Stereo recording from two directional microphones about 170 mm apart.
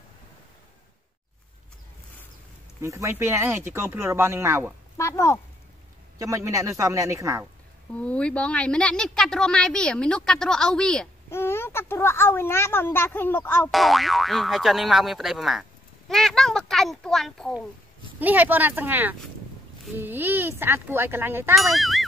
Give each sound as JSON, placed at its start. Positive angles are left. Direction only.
{"t": 2.8, "sound": "speech", "side_deg": -15}
{"t": 4.9, "sound": "speech", "side_deg": 15}
{"t": 6.1, "sound": "a man's voice", "side_deg": -20}
{"t": 7.9, "sound": "a woman's voice", "side_deg": 5}
{"t": 11.2, "sound": "speech", "side_deg": 15}
{"t": 13.7, "sound": "a woman's voice", "side_deg": 0}
{"t": 18.2, "sound": "speech", "side_deg": -10}
{"t": 21.7, "sound": "a woman's voice", "side_deg": 0}